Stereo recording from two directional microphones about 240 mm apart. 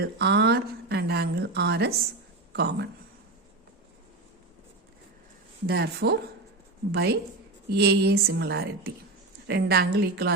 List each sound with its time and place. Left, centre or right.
0.0 s speech: right
5.6 s a woman's voice: right